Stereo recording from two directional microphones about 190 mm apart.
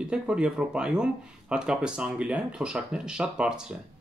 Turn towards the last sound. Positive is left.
turn(degrees=-5)  # may be behind; listen again after turning